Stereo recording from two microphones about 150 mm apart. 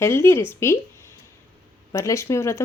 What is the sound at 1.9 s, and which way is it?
Speech, 20° left (ahead or behind).